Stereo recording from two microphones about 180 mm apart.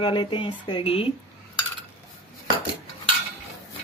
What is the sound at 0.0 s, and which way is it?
Speech, 25° left (ahead or behind).